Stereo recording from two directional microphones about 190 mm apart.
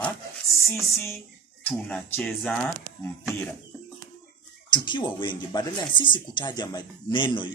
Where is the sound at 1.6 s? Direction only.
5° left (ahead or behind).